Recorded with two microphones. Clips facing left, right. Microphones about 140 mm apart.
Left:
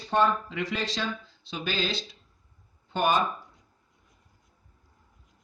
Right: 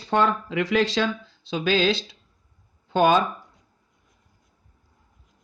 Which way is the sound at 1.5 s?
90° right.